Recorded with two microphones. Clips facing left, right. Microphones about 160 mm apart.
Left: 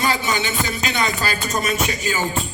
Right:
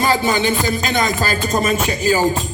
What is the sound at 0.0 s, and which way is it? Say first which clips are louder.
Speech: right 5 dB; 40° right (ahead or behind).